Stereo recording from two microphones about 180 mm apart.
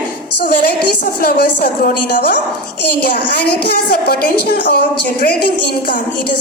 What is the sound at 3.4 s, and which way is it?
A woman's voice, 60° left (ahead or behind).